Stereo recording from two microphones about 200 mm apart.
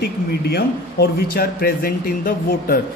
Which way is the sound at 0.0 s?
55° left (ahead or behind).